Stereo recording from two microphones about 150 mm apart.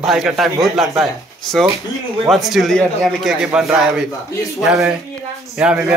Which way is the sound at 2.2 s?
Centre (ahead or behind).